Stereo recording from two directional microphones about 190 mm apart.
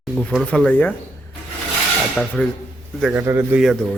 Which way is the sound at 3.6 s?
Centre (ahead or behind).